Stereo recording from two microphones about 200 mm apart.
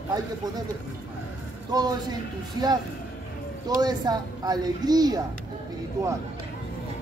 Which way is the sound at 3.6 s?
20° right (ahead or behind).